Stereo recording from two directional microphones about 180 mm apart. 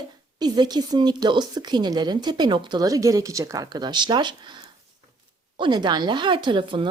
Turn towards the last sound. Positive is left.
turn(degrees=-25)  # may be behind; listen again after turning